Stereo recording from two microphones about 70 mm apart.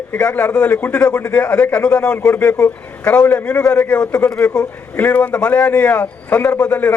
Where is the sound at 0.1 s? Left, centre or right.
Left.